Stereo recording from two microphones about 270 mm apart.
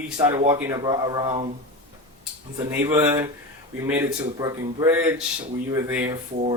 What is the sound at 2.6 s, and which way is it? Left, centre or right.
Speech, centre.